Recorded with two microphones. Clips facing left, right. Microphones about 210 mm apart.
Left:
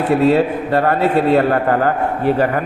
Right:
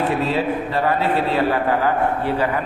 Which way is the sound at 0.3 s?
55° left (ahead or behind).